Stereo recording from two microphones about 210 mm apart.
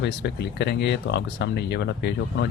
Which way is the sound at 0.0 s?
55° left (ahead or behind).